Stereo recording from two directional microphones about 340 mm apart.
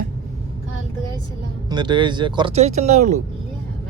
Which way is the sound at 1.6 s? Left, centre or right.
Centre.